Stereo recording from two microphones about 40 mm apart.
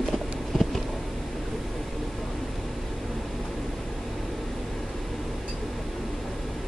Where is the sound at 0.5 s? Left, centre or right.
Centre.